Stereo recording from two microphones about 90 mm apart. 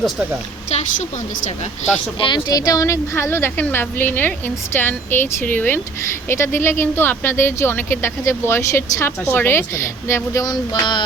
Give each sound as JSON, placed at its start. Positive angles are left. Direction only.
{"t": 2.1, "sound": "a woman's voice", "side_deg": 70}
{"t": 2.5, "sound": "speech", "side_deg": 45}
{"t": 10.4, "sound": "music", "side_deg": 50}